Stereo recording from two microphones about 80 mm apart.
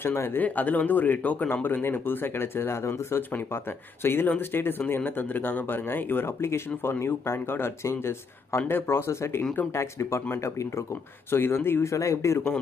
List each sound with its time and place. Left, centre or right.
0.0 s speech: left
0.4 s speech: left
11.9 s speech: left